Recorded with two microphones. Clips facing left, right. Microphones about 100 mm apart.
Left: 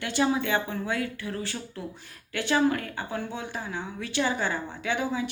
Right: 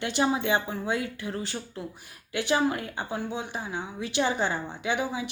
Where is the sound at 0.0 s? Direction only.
20° right (ahead or behind).